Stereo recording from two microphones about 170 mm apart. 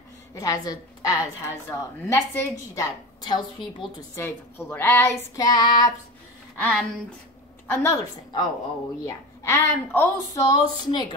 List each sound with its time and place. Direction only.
0.3 s a woman's voice: 20° left (ahead or behind)
4.2 s speech: 15° left (ahead or behind)
6.6 s a woman's voice: 5° left (ahead or behind)
7.9 s a woman's voice: 25° left (ahead or behind)